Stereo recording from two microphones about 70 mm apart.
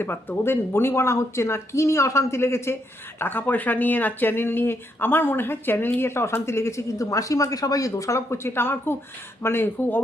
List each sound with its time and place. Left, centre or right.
0.0 s speech: left